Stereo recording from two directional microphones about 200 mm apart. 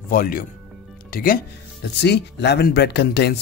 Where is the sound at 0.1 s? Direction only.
45° left (ahead or behind).